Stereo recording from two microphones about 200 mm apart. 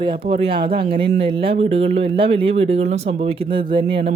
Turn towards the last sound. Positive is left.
turn(degrees=-25)  # may be behind; listen again after turning